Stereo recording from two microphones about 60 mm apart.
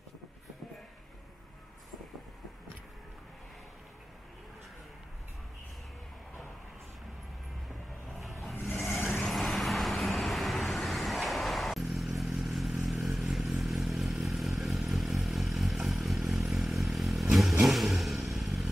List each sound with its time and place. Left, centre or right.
8.2 s vehicle: centre
8.5 s vehicle: left
9.2 s vehicle: centre
14.2 s motorcycle: centre
16.4 s vehicle: centre